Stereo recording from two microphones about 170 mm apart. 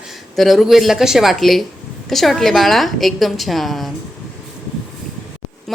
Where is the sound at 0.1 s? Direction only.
Centre (ahead or behind).